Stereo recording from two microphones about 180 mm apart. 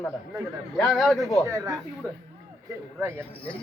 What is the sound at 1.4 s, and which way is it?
Speech, 20° right (ahead or behind).